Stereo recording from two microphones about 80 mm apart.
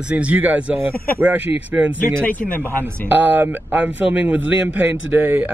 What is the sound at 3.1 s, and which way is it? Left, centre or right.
A man's voice, right.